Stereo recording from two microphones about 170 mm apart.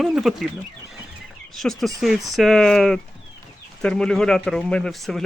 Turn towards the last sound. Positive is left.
turn(degrees=0)  # may be behind; listen again after turning